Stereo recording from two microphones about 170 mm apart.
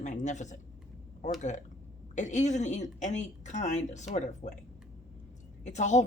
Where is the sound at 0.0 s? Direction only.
45° left (ahead or behind).